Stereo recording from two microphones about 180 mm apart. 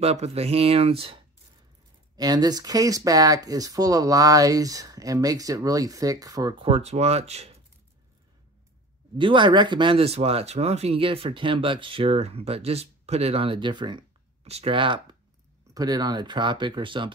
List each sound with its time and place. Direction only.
0.0 s speech: 35° right (ahead or behind)
6.7 s speech: 35° right (ahead or behind)
9.2 s speech: 25° right (ahead or behind)